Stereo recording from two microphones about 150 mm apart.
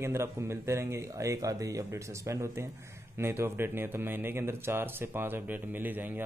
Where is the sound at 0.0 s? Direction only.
20° right (ahead or behind).